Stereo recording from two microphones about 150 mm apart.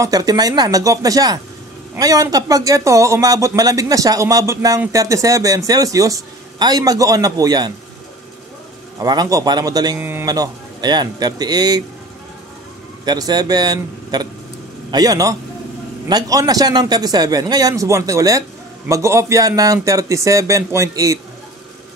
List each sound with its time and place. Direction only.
0.0 s speech: 25° right (ahead or behind)
9.0 s speech: 25° right (ahead or behind)
9.9 s speech: 15° right (ahead or behind)
10.2 s speech: 25° right (ahead or behind)
13.0 s speech: 25° right (ahead or behind)